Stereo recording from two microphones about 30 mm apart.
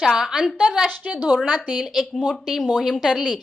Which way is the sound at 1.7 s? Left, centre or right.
Centre.